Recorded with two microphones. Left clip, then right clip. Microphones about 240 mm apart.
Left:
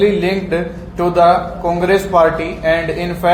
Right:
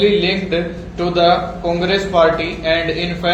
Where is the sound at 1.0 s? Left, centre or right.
Left.